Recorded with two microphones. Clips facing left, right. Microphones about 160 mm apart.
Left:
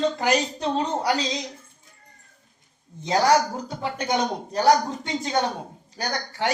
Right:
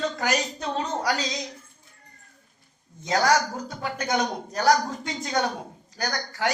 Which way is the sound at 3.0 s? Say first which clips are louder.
Left 3 dB; 25° left (ahead or behind).